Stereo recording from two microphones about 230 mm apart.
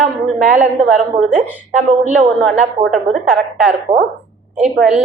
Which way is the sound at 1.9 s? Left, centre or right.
Right.